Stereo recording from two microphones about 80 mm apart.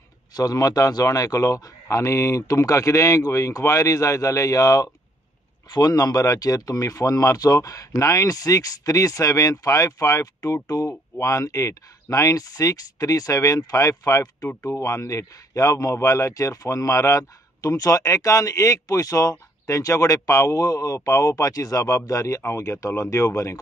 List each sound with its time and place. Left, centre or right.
0.4 s speech: left